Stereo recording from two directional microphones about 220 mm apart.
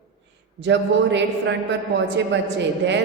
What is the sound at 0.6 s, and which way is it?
Speech, 55° right (ahead or behind).